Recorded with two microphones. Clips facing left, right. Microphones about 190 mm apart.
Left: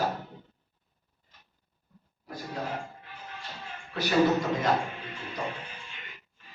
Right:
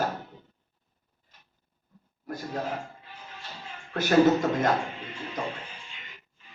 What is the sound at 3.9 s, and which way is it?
Speech, 50° right (ahead or behind).